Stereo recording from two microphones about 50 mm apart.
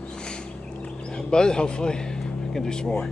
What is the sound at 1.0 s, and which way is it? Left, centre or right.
Vehicle, centre.